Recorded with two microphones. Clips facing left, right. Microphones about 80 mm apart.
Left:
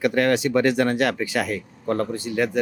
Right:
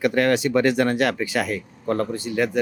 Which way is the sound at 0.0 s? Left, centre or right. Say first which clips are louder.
Even; centre.